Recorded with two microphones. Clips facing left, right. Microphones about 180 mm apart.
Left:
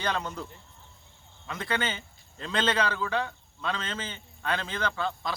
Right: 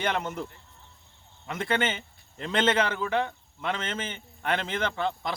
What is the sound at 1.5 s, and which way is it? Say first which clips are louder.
A man's voice: right 3 dB; 25° right (ahead or behind).